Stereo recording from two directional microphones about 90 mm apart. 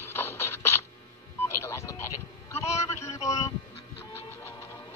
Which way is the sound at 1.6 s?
30° left (ahead or behind).